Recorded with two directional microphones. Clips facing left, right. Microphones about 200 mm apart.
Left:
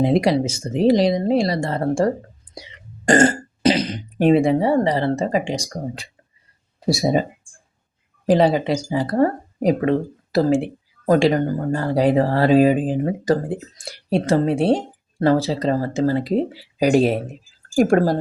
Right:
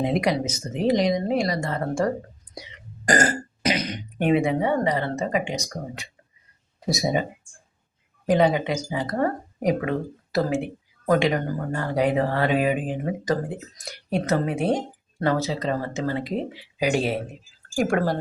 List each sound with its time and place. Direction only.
0.0 s speech: 30° left (ahead or behind)
3.1 s throat clearing: 25° left (ahead or behind)
3.6 s speech: 30° left (ahead or behind)
8.3 s speech: 30° left (ahead or behind)